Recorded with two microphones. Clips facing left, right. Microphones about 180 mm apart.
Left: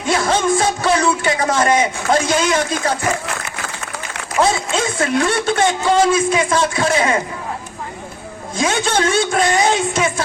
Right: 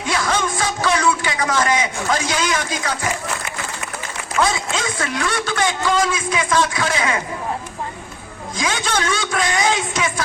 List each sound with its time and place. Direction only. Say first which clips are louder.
0.1 s a man's voice: left 5 dB; 30° left (ahead or behind)
4.4 s a man's voice: left 4 dB; 25° left (ahead or behind)
8.5 s a man's voice: left 5 dB; 25° left (ahead or behind)